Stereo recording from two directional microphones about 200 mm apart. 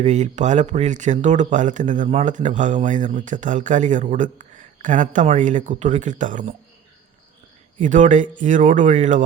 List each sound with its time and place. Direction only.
0.0 s speech: 35° right (ahead or behind)
7.8 s speech: 40° right (ahead or behind)